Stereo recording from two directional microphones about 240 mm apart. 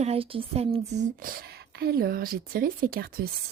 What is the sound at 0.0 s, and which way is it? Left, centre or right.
Speech, right.